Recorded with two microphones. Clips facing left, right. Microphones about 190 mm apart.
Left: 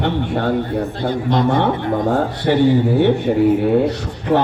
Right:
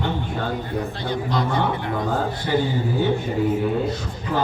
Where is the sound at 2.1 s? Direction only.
70° left (ahead or behind).